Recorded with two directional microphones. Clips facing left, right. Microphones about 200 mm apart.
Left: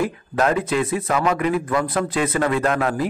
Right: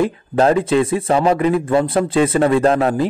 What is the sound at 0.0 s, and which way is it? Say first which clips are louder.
A man's voice: right 5 dB; 30° right (ahead or behind).